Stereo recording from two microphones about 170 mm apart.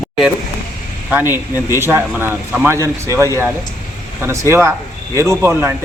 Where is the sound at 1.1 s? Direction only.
10° right (ahead or behind).